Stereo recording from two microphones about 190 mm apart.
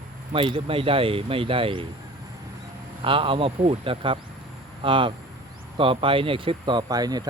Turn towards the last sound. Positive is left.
turn(degrees=-20)  # may be behind; listen again after turning